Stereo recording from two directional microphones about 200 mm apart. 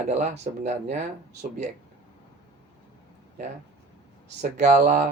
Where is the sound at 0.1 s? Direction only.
35° right (ahead or behind).